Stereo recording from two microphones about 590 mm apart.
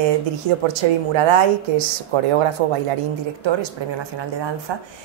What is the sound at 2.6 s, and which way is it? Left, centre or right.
Speech, right.